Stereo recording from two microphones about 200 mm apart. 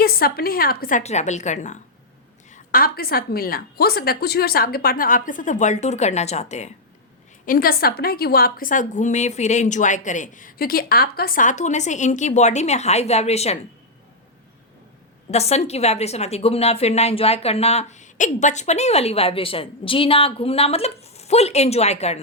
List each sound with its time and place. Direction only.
0.0 s a woman's voice: 50° left (ahead or behind)
7.4 s a woman's voice: 45° left (ahead or behind)
15.3 s a woman's voice: 30° left (ahead or behind)